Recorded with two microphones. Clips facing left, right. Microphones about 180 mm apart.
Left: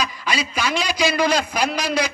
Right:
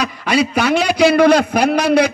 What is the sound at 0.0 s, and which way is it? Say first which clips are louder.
A man's voice: right 8 dB; 60° right (ahead or behind).